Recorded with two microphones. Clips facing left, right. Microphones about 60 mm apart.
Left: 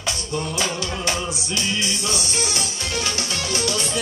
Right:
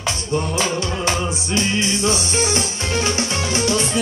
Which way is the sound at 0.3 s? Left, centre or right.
Right.